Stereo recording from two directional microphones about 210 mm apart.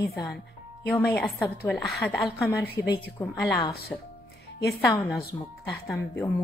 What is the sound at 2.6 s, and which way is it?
Speech, 50° left (ahead or behind).